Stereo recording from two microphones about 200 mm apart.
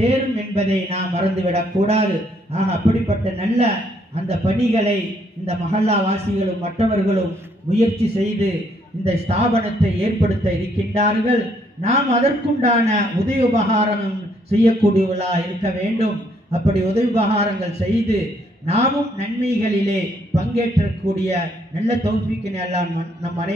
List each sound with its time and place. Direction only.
0.0 s a man's voice: 30° right (ahead or behind)